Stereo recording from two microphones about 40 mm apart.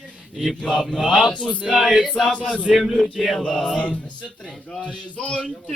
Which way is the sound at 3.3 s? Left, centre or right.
Left.